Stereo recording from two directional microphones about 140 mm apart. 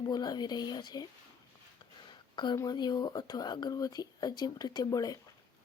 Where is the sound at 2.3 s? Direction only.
35° left (ahead or behind).